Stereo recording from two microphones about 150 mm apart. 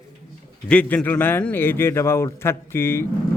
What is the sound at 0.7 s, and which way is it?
A man's voice, 10° left (ahead or behind).